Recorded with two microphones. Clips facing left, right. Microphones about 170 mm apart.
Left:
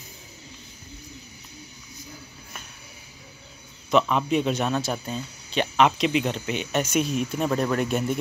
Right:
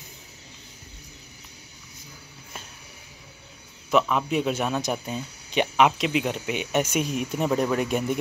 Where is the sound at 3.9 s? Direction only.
5° right (ahead or behind).